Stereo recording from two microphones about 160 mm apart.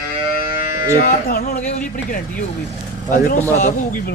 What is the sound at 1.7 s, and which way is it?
Speech, 50° left (ahead or behind).